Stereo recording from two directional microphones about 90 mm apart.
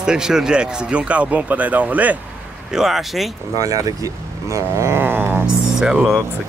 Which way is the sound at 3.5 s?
40° right (ahead or behind).